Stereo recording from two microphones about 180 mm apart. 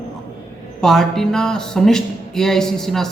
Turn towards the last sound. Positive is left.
turn(degrees=0)  # may be behind; listen again after turning